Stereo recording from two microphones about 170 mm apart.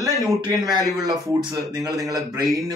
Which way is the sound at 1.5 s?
20° right (ahead or behind).